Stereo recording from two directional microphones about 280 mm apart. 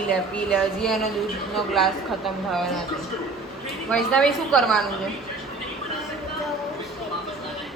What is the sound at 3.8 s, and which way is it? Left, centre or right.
A woman's voice, centre.